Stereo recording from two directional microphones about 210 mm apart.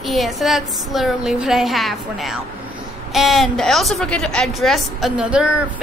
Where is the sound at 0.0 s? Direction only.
Centre (ahead or behind).